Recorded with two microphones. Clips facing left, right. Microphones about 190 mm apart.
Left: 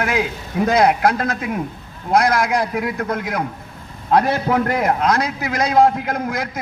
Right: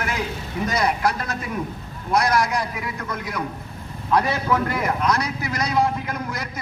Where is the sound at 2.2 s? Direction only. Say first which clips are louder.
Left 4 dB; 75° left (ahead or behind); by 5.1 s 55° left (ahead or behind).